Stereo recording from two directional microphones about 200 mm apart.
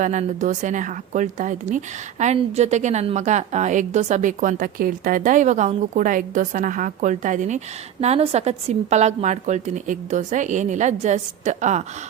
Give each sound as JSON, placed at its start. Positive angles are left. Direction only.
{"t": 0.0, "sound": "a woman's voice", "side_deg": -40}